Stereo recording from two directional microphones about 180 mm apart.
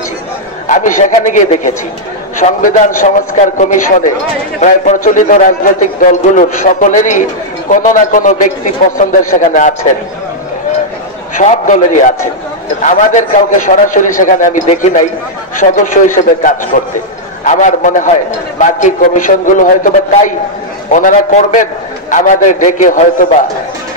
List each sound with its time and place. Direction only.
0.7 s a man's voice: 45° left (ahead or behind)
11.3 s a man's voice: 45° left (ahead or behind)